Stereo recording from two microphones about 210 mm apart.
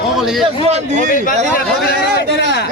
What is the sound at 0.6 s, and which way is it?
Speech, 30° right (ahead or behind).